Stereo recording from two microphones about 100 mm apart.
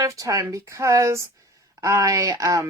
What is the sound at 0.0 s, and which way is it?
A woman's voice, 35° right (ahead or behind).